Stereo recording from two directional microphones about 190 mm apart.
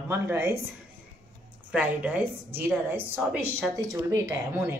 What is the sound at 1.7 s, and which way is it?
A woman's voice, 5° right (ahead or behind).